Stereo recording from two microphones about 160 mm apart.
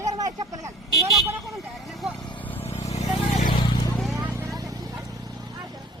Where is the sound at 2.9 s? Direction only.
45° left (ahead or behind).